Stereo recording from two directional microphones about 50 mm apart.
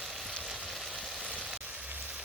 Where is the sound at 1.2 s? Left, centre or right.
Right.